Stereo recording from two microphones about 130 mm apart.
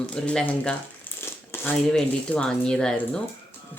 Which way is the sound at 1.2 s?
20° left (ahead or behind).